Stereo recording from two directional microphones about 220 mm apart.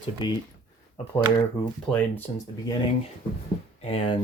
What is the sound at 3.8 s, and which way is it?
Speech, 25° left (ahead or behind).